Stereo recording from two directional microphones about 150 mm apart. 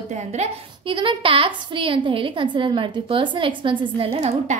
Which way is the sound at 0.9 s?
35° right (ahead or behind).